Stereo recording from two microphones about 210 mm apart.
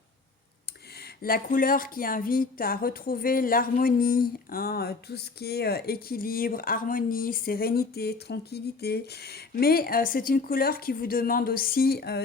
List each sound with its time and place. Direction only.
0.9 s a woman's voice: 45° left (ahead or behind)